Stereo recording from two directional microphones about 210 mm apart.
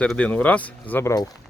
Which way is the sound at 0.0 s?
5° left (ahead or behind).